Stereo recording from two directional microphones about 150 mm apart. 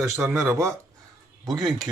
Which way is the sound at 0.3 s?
20° right (ahead or behind).